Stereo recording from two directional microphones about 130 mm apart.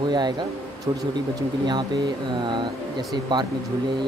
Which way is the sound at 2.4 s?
35° right (ahead or behind).